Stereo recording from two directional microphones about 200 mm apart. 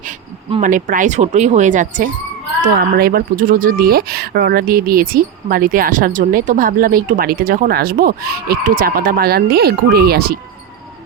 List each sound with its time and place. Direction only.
0.6 s speech: 40° right (ahead or behind)